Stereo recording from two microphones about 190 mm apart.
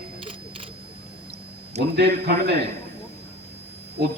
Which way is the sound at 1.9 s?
60° right (ahead or behind).